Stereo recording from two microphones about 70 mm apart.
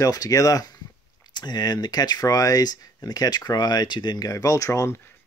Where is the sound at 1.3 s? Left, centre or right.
Left.